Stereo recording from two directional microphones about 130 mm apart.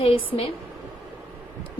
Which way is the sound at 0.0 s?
45° left (ahead or behind).